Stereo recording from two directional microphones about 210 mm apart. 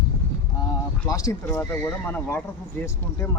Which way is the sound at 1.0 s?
15° left (ahead or behind).